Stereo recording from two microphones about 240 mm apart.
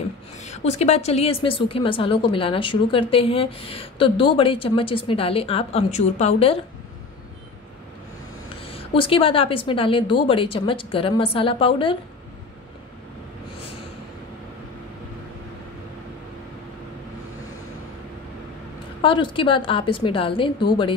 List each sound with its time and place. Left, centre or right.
0.4 s a woman's voice: left
8.5 s a woman's voice: left
18.9 s a woman's voice: left